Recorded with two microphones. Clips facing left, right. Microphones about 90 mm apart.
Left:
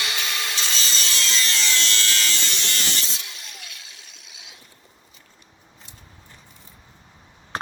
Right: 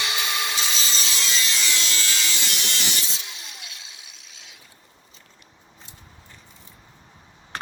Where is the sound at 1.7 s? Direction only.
15° right (ahead or behind).